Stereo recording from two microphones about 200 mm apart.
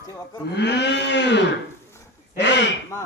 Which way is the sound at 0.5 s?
60° left (ahead or behind).